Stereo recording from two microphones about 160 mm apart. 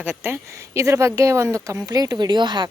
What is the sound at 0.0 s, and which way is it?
Speech, 10° right (ahead or behind).